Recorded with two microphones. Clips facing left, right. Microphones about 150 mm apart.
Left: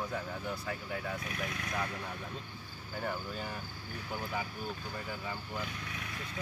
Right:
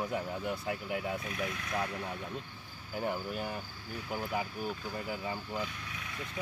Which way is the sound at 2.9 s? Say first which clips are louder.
Right 3 dB; 15° right (ahead or behind).